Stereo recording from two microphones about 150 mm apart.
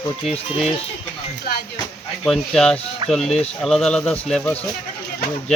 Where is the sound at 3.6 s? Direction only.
Centre (ahead or behind).